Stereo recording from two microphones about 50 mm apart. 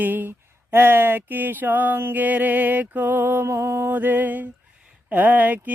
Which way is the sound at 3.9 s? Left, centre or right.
Right.